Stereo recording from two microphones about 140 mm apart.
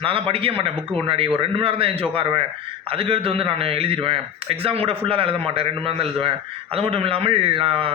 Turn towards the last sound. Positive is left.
turn(degrees=-40)  # may be behind; listen again after turning